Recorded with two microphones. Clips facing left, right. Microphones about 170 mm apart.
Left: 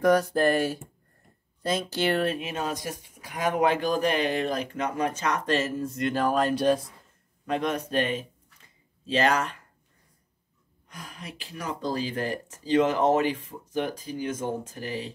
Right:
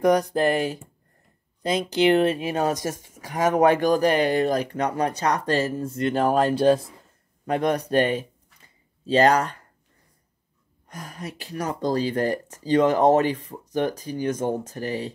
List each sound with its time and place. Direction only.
0.0 s speech: 15° right (ahead or behind); by 9.5 s 35° right (ahead or behind)
10.9 s speech: 45° right (ahead or behind)